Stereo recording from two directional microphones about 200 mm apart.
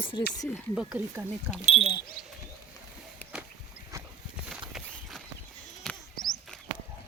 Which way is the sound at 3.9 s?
15° right (ahead or behind).